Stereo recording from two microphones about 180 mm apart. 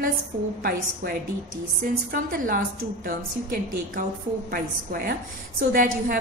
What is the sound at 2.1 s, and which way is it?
Speech, 50° right (ahead or behind).